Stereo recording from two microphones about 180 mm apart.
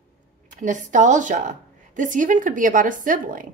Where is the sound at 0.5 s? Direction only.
45° right (ahead or behind).